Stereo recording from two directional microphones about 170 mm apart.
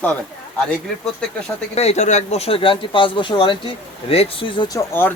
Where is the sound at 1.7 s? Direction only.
40° left (ahead or behind).